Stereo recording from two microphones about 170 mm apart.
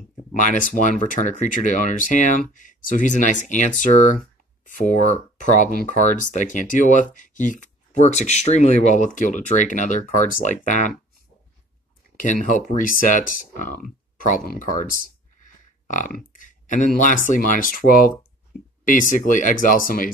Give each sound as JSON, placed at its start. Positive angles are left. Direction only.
{"t": 0.3, "sound": "speech", "side_deg": 50}
{"t": 12.4, "sound": "speech", "side_deg": 50}
{"t": 15.9, "sound": "speech", "side_deg": 50}